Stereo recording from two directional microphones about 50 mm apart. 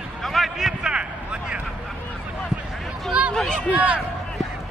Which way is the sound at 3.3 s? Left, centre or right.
Centre.